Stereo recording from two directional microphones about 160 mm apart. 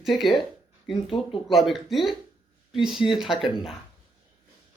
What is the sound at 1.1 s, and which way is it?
Speech, 30° left (ahead or behind).